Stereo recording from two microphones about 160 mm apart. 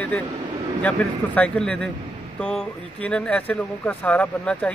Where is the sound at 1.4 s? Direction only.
5° left (ahead or behind).